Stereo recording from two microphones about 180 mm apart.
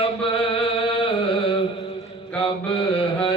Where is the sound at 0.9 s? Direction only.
30° left (ahead or behind).